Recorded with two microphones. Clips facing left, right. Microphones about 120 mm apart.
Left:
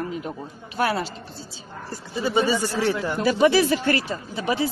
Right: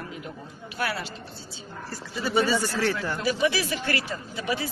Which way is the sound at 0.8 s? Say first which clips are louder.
Left 7 dB; 30° left (ahead or behind).